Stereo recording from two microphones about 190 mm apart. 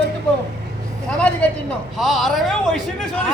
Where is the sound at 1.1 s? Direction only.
5° left (ahead or behind).